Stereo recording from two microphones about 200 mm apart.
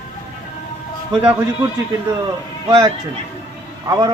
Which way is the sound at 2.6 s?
20° right (ahead or behind).